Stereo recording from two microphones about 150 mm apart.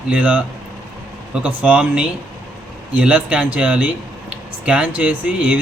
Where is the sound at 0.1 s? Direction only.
10° right (ahead or behind).